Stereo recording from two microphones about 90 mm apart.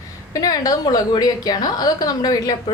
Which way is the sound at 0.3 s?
45° left (ahead or behind).